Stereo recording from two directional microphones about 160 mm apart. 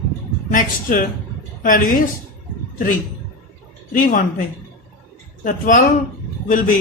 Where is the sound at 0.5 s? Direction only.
55° left (ahead or behind).